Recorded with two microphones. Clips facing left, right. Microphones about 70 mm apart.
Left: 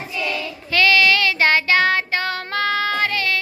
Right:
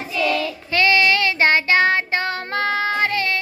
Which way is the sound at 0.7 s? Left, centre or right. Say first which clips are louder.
Left 1 dB; right.